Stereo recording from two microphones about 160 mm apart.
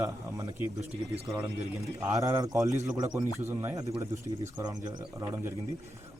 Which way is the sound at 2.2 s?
20° right (ahead or behind).